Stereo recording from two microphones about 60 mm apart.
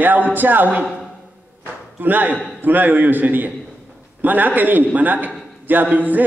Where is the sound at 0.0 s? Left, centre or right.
Right.